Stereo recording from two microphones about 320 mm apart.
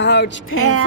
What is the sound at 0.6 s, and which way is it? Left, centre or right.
Speech, right.